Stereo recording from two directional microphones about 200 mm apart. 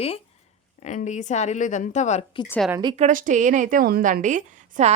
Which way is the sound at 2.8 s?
20° right (ahead or behind).